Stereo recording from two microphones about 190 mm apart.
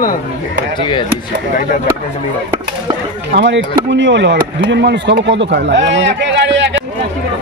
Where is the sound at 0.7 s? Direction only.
25° left (ahead or behind).